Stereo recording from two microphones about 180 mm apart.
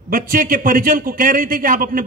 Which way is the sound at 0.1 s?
50° right (ahead or behind).